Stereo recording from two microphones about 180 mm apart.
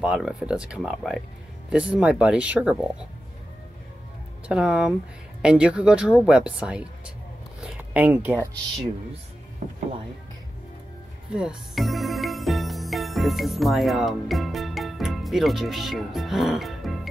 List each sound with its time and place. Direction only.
0.0 s speech: 5° right (ahead or behind)
4.5 s speech: 5° right (ahead or behind)
9.6 s speech: 40° right (ahead or behind)
11.3 s music: centre (ahead or behind)